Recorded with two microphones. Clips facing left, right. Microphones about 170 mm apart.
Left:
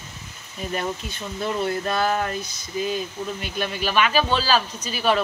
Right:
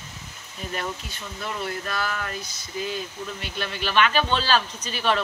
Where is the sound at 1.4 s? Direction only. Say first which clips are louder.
Left 6 dB; 25° left (ahead or behind).